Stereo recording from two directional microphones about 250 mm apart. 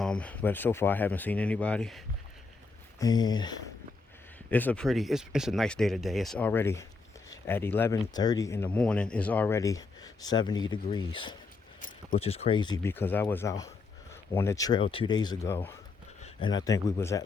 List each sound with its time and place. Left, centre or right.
0.0 s speech: centre
3.0 s speech: centre
4.5 s speech: centre
11.8 s speech: left; by 17.2 s centre